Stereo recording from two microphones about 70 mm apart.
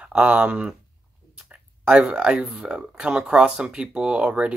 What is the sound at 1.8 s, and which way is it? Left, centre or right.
Speech, centre.